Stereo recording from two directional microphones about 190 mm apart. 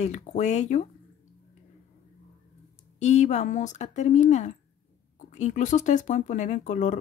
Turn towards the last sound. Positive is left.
turn(degrees=40)  # may be behind; listen again after turning